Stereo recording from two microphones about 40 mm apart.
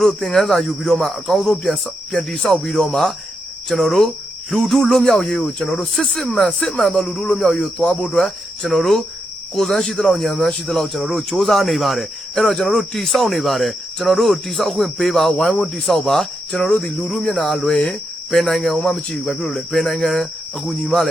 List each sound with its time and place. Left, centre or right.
0.3 s speech: centre
2.5 s cricket: centre
3.7 s speech: centre
4.5 s cricket: centre
6.2 s speech: left
7.0 s speech: centre
7.4 s cricket: centre
10.4 s speech: centre
16.6 s cricket: centre
17.2 s speech: left; by 18.6 s centre
18.6 s cricket: centre
20.7 s speech: centre